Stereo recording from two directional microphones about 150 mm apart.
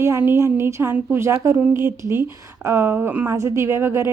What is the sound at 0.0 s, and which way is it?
A woman's voice, 15° right (ahead or behind).